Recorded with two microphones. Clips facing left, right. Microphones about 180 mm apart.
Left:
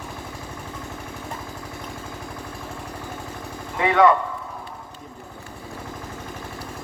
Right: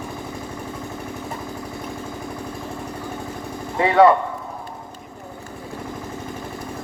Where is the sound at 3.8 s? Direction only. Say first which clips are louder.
Right 3 dB; 30° right (ahead or behind).